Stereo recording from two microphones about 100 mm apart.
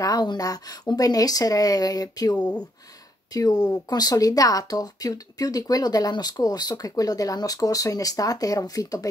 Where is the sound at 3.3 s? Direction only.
40° left (ahead or behind).